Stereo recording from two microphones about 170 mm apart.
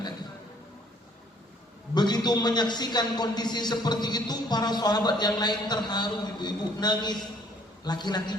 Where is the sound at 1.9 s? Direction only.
25° left (ahead or behind).